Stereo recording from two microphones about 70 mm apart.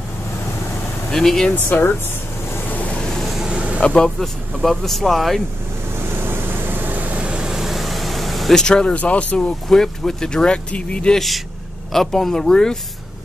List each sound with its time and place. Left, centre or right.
1.1 s speech: centre
1.5 s speech: left
2.7 s waves: left
3.0 s vehicle: centre
3.4 s vehicle: centre
3.8 s speech: centre
4.2 s speech: centre
5.9 s vehicle: right; by 9.5 s centre
9.7 s speech: centre
11.1 s speech: centre